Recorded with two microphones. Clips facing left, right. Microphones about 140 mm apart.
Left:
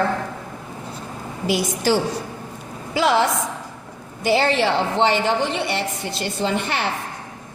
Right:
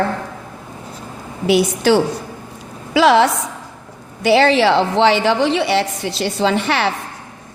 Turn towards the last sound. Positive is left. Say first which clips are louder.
# right 6 dB
turn(degrees=-90)